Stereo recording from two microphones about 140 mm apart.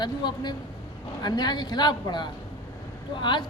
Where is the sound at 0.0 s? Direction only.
30° left (ahead or behind).